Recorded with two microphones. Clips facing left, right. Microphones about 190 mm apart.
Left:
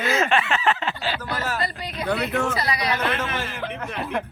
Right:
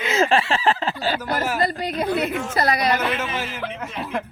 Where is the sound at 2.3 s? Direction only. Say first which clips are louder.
Left 3 dB; 65° left (ahead or behind).